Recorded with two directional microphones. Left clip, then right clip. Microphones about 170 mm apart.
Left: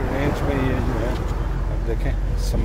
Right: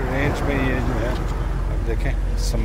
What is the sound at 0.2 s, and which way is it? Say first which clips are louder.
Vehicle: right 1 dB; 10° left (ahead or behind).